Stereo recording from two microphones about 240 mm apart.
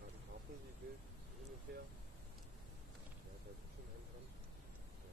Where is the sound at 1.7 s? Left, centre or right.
Right.